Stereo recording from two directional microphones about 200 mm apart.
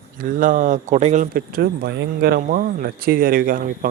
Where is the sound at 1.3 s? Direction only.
50° right (ahead or behind).